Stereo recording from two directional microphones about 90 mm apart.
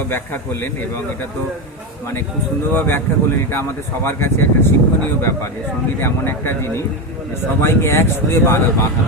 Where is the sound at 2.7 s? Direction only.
25° left (ahead or behind).